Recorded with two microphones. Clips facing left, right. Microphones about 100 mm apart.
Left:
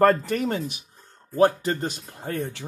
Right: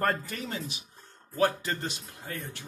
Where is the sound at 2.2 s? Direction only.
70° left (ahead or behind).